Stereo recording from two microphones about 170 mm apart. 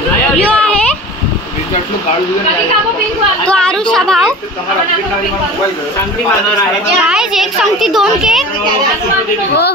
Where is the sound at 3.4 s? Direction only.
5° left (ahead or behind).